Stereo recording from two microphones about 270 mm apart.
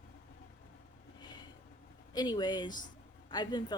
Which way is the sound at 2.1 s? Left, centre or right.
Centre.